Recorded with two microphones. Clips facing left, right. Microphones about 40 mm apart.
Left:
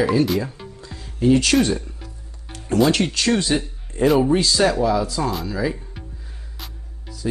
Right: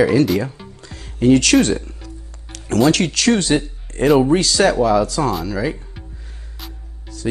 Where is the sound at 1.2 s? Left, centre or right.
Right.